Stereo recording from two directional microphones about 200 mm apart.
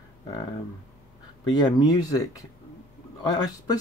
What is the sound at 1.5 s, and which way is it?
Speech, 20° left (ahead or behind).